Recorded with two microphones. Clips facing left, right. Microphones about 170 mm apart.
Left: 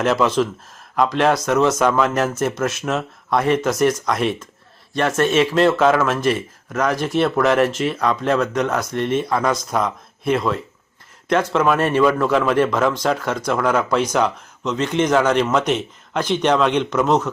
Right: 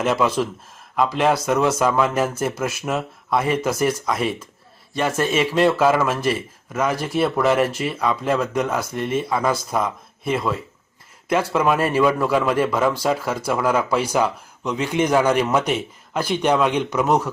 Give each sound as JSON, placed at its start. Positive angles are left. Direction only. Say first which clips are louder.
{"t": 0.0, "sound": "speech", "louder": "left 2 dB", "side_deg": -5}